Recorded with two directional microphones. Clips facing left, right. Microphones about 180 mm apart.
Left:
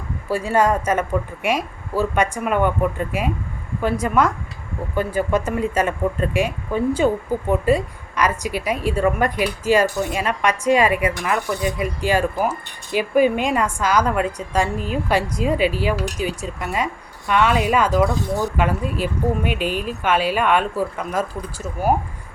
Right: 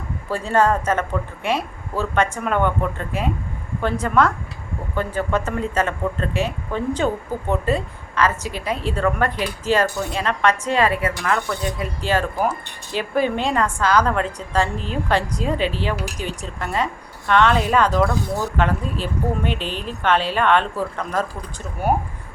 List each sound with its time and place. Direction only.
0.3 s a woman's voice: 10° left (ahead or behind)